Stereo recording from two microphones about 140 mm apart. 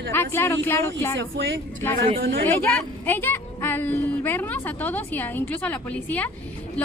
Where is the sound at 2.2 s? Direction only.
90° right.